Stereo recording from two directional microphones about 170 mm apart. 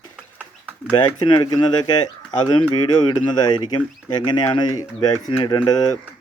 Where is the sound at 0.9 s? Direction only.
25° left (ahead or behind).